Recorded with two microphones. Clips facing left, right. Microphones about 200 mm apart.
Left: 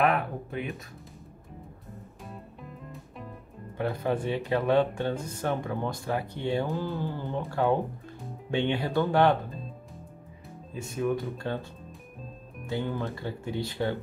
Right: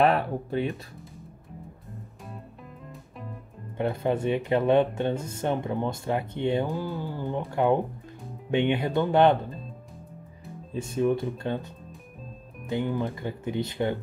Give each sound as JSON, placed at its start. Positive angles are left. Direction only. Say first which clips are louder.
{"t": 0.0, "sound": "speech", "louder": "right 3 dB", "side_deg": -30}
{"t": 2.2, "sound": "music", "louder": "even", "side_deg": 0}
{"t": 3.7, "sound": "speech", "louder": "right 2 dB", "side_deg": -20}
{"t": 10.7, "sound": "speech", "louder": "right 4 dB", "side_deg": -25}
{"t": 12.6, "sound": "speech", "louder": "right 3 dB", "side_deg": -15}